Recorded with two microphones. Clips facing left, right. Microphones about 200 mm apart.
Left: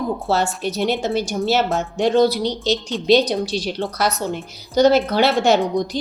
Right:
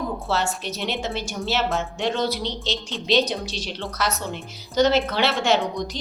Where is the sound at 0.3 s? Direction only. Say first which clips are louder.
Left 5 dB; 35° left (ahead or behind).